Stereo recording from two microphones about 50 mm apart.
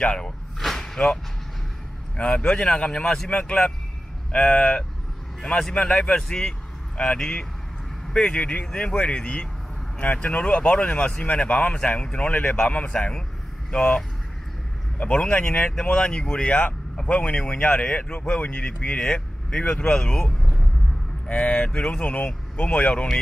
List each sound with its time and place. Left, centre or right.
0.0 s speech: centre
0.6 s whip: centre
2.1 s speech: left
3.3 s speech: left
22.0 s speech: left